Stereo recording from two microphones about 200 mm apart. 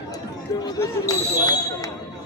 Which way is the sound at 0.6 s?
20° left (ahead or behind).